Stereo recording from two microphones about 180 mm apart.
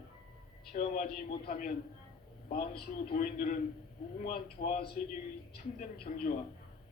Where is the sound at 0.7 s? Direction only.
50° left (ahead or behind).